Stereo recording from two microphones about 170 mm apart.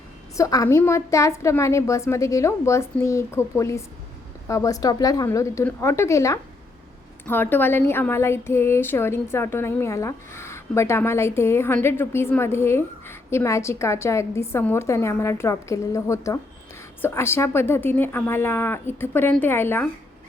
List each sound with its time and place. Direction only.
0.3 s a woman's voice: 20° left (ahead or behind)